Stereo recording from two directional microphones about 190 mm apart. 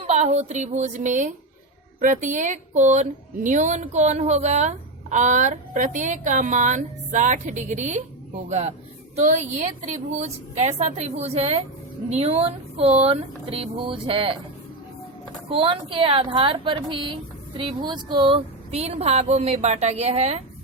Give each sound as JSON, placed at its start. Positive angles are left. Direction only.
{"t": 0.1, "sound": "a woman's voice", "side_deg": -35}
{"t": 15.4, "sound": "a woman's voice", "side_deg": -25}